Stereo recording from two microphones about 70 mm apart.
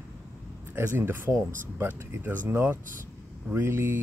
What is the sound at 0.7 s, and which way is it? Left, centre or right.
Speech, right.